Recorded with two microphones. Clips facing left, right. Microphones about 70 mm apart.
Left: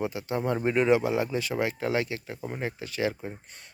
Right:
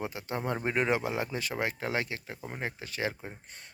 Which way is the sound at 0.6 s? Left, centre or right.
Right.